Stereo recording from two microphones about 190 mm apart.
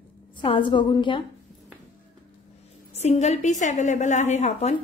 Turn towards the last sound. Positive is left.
turn(degrees=35)  # may be behind; listen again after turning